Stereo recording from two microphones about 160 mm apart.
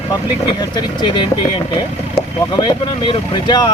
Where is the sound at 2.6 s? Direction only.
30° left (ahead or behind).